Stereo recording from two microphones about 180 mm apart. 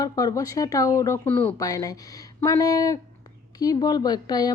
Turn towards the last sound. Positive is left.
turn(degrees=20)  # may be behind; listen again after turning